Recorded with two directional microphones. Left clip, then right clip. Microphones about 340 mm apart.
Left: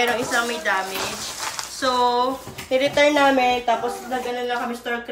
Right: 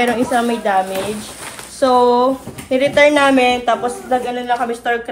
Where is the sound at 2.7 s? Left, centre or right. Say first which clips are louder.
Right 6 dB; right.